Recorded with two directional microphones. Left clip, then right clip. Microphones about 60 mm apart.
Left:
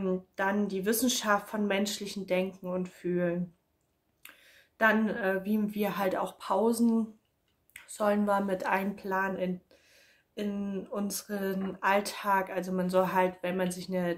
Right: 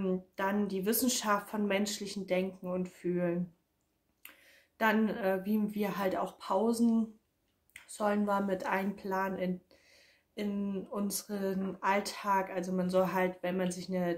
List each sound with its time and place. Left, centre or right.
0.0 s a woman's voice: left